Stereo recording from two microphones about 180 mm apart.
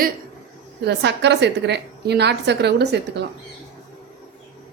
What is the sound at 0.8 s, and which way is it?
A woman's voice, 70° right (ahead or behind).